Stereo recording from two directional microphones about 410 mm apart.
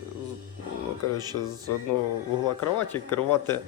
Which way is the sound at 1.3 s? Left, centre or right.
Left.